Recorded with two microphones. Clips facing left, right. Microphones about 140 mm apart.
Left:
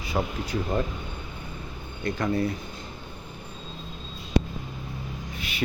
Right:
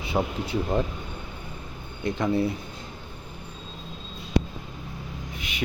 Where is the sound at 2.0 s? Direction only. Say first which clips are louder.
Right 1 dB; 20° right (ahead or behind).